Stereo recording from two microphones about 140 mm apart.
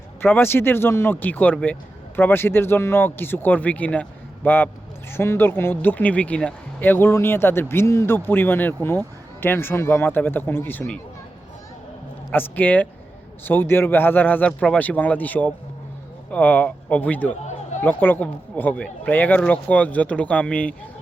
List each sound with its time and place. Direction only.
0.2 s speech: 15° left (ahead or behind)
12.3 s speech: 15° left (ahead or behind)
17.4 s chatter: 55° left (ahead or behind)
17.8 s speech: 10° left (ahead or behind)